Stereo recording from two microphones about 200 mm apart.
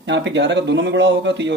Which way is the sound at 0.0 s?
65° right (ahead or behind).